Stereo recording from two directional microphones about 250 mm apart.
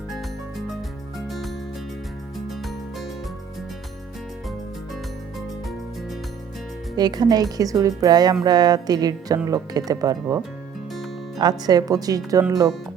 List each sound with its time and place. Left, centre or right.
1.3 s music: centre
6.9 s speech: centre